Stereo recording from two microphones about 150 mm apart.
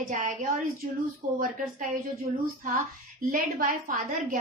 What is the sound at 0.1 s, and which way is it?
A woman's voice, 55° right (ahead or behind).